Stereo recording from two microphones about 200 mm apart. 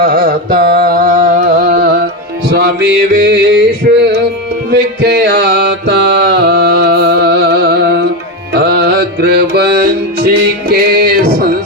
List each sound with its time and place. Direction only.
0.0 s a sound: 45° right (ahead or behind)
2.5 s music: 55° right (ahead or behind)
4.7 s mantra: 55° right (ahead or behind)
8.5 s music: 55° right (ahead or behind)